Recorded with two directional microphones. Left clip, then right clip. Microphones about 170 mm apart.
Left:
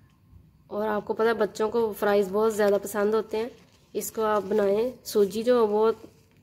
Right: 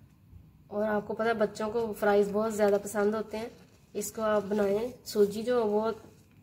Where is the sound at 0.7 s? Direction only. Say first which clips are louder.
Left 3 dB; 50° left (ahead or behind).